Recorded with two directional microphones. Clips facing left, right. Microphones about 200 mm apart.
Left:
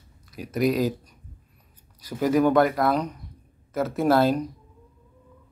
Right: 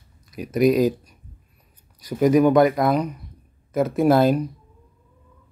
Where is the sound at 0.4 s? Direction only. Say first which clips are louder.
Right 5 dB; 20° right (ahead or behind).